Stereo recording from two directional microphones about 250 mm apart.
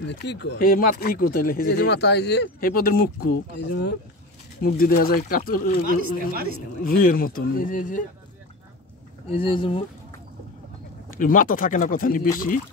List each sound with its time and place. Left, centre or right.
0.2 s speech: left
4.6 s speech: left
9.3 s speech: left
11.1 s speech: left